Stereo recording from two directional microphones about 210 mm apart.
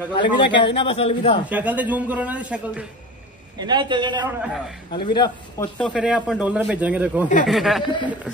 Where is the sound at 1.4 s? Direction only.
5° right (ahead or behind).